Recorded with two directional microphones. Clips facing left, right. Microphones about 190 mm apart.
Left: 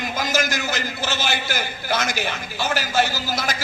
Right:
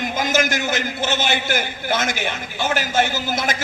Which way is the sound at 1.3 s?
55° right (ahead or behind).